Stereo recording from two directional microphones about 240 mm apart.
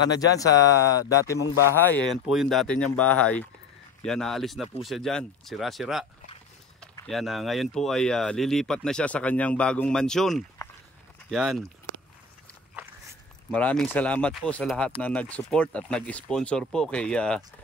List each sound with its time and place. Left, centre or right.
0.2 s speech: centre
2.2 s speech: centre
13.5 s speech: centre